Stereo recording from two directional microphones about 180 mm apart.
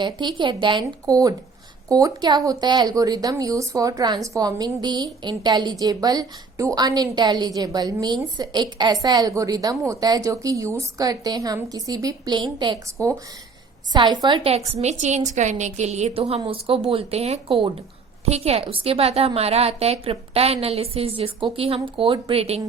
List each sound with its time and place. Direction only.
0.0 s a woman's voice: 25° right (ahead or behind)